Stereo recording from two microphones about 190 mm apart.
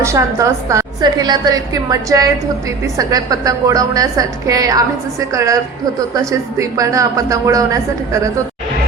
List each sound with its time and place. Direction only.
0.0 s a woman's voice: 15° right (ahead or behind)